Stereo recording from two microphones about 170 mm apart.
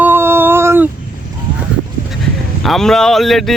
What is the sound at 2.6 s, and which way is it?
Speech, centre (ahead or behind).